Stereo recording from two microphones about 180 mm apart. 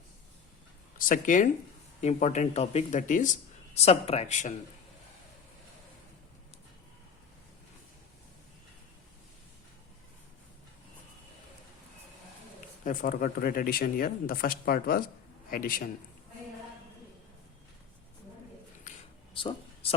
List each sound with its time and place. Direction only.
0.9 s speech: 50° left (ahead or behind)
3.8 s speech: 35° left (ahead or behind)
12.8 s speech: 45° left (ahead or behind)
19.3 s a sound: 30° left (ahead or behind)